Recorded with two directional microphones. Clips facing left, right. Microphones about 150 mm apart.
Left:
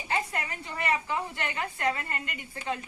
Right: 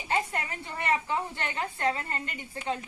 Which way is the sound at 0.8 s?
25° right (ahead or behind).